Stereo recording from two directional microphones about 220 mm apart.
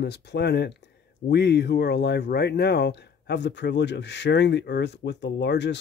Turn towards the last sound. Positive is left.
turn(degrees=50)  # may be behind; listen again after turning